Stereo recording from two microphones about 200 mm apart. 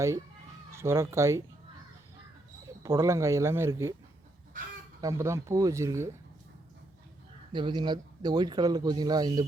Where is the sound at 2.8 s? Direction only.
15° right (ahead or behind).